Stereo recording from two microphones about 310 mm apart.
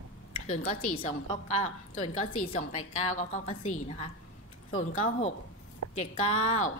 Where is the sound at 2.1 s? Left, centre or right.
Left.